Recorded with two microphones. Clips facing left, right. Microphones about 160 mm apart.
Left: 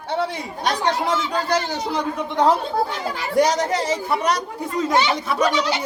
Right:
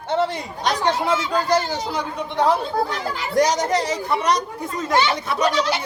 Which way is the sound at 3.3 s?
5° left (ahead or behind).